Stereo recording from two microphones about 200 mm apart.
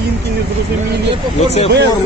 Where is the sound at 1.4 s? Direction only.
30° left (ahead or behind).